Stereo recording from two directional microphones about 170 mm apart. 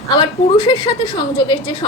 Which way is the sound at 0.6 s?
25° left (ahead or behind).